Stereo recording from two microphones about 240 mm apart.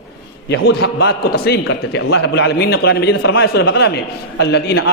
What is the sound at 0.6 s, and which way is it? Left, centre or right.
A man's voice, left.